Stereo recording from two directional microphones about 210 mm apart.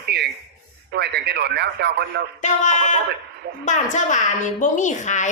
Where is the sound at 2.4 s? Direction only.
35° left (ahead or behind).